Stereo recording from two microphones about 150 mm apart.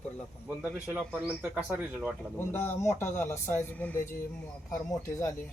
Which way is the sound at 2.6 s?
15° left (ahead or behind).